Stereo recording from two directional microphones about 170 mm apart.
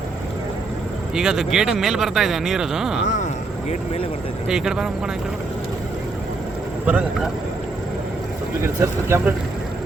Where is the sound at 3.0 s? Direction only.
45° left (ahead or behind).